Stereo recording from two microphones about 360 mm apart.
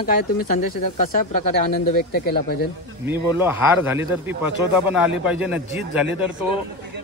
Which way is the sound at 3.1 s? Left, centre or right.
Centre.